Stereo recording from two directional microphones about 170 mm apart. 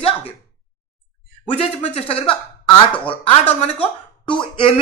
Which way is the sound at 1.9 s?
35° left (ahead or behind).